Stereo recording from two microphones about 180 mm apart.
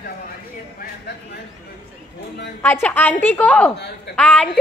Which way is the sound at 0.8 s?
65° left (ahead or behind).